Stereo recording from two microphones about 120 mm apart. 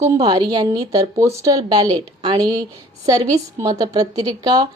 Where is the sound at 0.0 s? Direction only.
35° right (ahead or behind).